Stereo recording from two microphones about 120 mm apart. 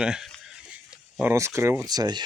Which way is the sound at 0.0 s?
5° right (ahead or behind).